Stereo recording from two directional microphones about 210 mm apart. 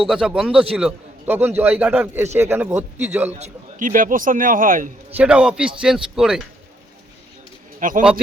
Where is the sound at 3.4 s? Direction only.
40° right (ahead or behind).